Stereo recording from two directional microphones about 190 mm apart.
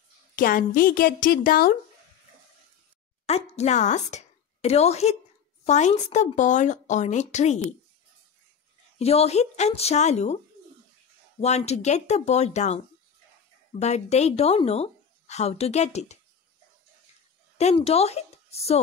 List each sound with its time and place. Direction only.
0.4 s a woman's voice: 50° left (ahead or behind)
3.3 s a woman's voice: 35° left (ahead or behind)
8.9 s a woman's voice: 30° left (ahead or behind)
11.4 s a woman's voice: 35° left (ahead or behind)
17.6 s a woman's voice: 35° left (ahead or behind)